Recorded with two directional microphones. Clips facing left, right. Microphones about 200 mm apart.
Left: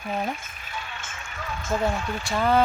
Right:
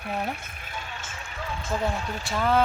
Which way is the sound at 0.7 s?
45° right (ahead or behind).